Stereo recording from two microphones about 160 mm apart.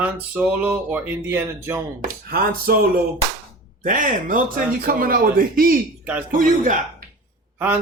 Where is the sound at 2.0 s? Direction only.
60° right (ahead or behind).